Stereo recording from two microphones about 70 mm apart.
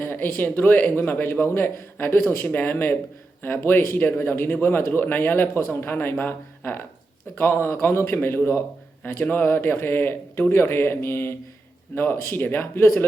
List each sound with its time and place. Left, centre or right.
0.0 s a man's voice: left